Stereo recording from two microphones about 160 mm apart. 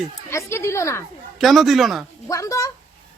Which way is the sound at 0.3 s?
15° left (ahead or behind).